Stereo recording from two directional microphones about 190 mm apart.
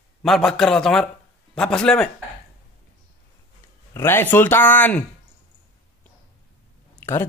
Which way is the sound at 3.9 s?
10° left (ahead or behind).